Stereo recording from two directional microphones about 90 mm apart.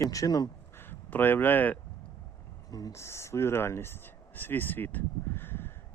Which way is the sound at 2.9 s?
30° left (ahead or behind).